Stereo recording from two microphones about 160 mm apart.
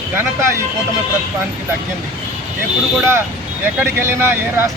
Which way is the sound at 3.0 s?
15° right (ahead or behind).